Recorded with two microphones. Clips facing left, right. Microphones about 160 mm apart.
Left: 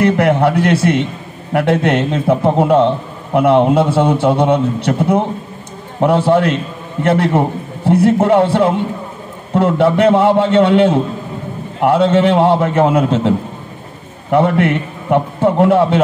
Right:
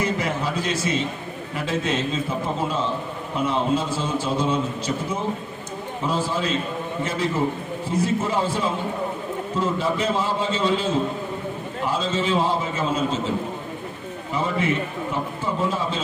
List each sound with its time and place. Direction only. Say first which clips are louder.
0.0 s a man's voice: left 12 dB; 70° left (ahead or behind)
14.3 s a man's voice: left 11 dB; 65° left (ahead or behind)